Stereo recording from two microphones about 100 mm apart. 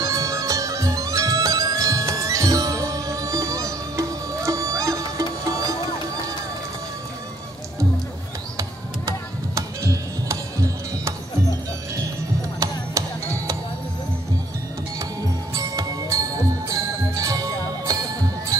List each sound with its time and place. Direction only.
0.0 s bagpipes: 30° right (ahead or behind)
9.6 s music: 30° right (ahead or behind)
12.5 s music: 30° right (ahead or behind)
15.5 s music: 35° right (ahead or behind)